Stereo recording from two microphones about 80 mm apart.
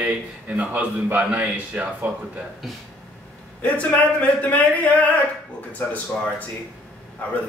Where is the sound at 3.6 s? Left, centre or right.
Centre.